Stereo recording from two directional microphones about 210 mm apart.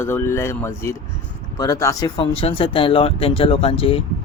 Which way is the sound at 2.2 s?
25° left (ahead or behind).